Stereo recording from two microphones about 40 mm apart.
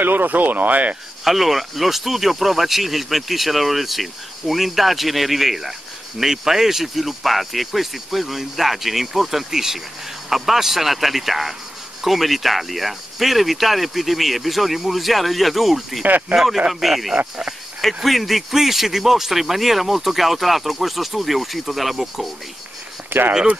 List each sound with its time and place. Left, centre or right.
0.0 s speech: right
1.2 s speech: centre
23.0 s a sound: right